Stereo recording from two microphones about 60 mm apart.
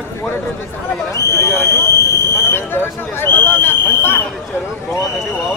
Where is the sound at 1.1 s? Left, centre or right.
Left.